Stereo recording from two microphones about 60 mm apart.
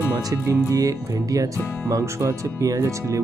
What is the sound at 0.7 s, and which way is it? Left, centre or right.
Speech, right.